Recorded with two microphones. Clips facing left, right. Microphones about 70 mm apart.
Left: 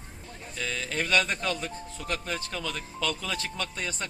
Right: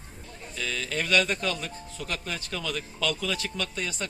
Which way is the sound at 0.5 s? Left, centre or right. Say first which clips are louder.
Even; left.